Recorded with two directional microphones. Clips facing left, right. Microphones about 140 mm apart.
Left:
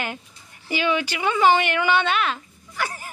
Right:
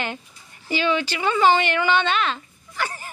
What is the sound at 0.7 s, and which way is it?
Speech, 10° left (ahead or behind).